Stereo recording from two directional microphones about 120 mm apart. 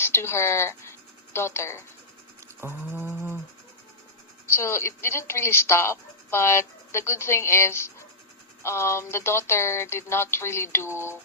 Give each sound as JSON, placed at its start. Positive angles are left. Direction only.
{"t": 0.0, "sound": "speech", "side_deg": 20}
{"t": 2.6, "sound": "a sound", "side_deg": -20}
{"t": 4.4, "sound": "speech", "side_deg": 20}